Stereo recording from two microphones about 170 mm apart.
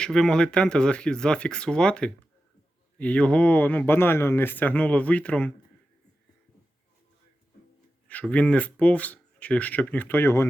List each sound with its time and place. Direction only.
0.0 s speech: 5° left (ahead or behind)
8.0 s speech: 5° left (ahead or behind)